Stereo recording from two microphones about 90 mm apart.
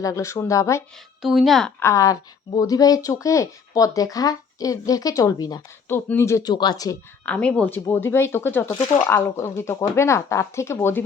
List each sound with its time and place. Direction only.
0.0 s speech: 35° left (ahead or behind)
1.2 s speech: 5° right (ahead or behind)
1.8 s speech: 35° left (ahead or behind)
5.9 s speech: 30° left (ahead or behind)
6.4 s speech: 55° left (ahead or behind)
7.3 s speech: 10° left (ahead or behind); by 11.0 s 30° left (ahead or behind)